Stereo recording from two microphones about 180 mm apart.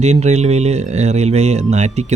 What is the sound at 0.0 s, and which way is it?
Speech, 40° right (ahead or behind).